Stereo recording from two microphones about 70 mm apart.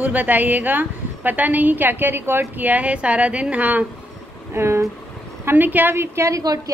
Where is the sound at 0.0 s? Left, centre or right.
Right.